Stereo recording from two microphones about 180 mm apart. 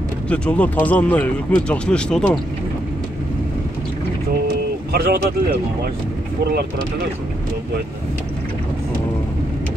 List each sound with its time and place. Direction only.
0.3 s speech: 5° left (ahead or behind)
4.9 s speech: 60° right (ahead or behind)